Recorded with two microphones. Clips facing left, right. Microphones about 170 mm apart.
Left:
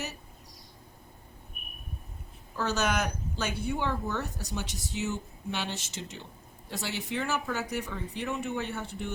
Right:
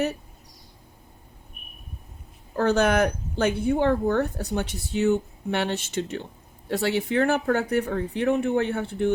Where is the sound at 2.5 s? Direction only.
55° right (ahead or behind).